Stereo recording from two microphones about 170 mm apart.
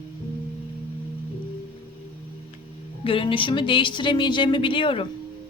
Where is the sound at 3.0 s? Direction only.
30° left (ahead or behind).